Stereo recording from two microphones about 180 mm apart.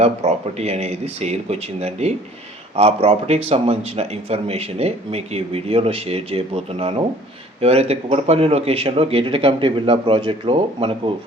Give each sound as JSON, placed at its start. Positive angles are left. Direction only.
{"t": 0.0, "sound": "speech", "side_deg": -35}